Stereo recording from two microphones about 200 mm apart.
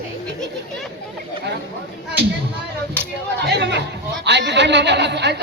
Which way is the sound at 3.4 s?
60° right (ahead or behind).